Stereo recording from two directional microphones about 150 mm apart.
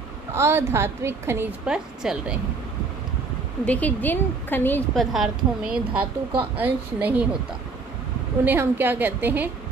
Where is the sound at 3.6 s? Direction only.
10° left (ahead or behind).